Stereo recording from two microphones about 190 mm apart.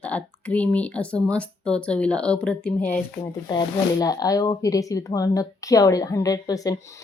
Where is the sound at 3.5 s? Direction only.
20° left (ahead or behind).